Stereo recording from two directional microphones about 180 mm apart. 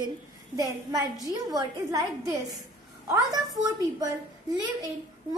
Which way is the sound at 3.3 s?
20° right (ahead or behind).